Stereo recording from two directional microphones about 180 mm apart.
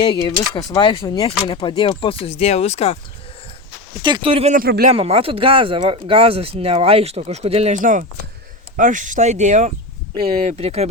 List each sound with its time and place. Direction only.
0.3 s speech: 20° left (ahead or behind); by 3.0 s 35° left (ahead or behind)
4.0 s speech: 30° right (ahead or behind)
4.5 s speech: 50° right (ahead or behind)
4.9 s speech: 35° right (ahead or behind)